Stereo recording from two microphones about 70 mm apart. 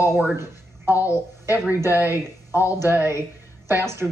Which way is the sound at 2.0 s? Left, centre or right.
Right.